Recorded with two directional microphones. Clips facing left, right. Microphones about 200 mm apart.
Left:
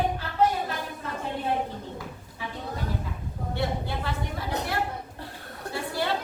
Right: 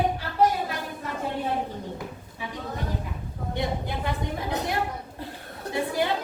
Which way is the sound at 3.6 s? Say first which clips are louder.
Right 1 dB; 20° right (ahead or behind).